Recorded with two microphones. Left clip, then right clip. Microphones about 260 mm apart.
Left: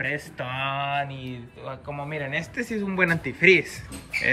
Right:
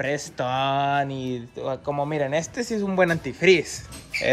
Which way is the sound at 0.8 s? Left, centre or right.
Right.